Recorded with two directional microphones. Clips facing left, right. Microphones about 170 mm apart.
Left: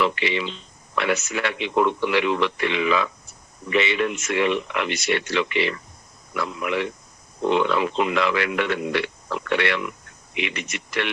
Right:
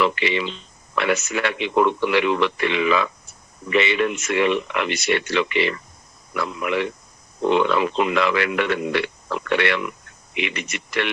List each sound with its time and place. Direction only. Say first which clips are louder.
0.0 s speech: right 2 dB; 65° right (ahead or behind)